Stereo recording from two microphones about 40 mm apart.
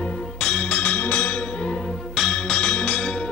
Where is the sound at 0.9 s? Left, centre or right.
Left.